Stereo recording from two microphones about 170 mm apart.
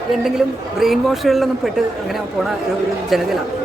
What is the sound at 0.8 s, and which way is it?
A woman's voice, centre (ahead or behind).